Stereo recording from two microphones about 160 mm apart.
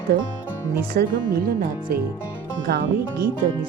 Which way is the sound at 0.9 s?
65° right (ahead or behind).